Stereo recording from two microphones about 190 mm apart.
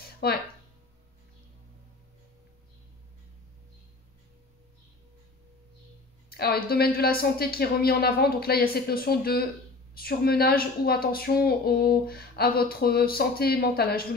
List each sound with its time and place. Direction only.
0.2 s speech: 55° left (ahead or behind)
6.3 s a woman's voice: 55° left (ahead or behind)